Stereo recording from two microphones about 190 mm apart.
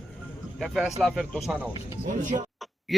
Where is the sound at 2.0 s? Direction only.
45° right (ahead or behind).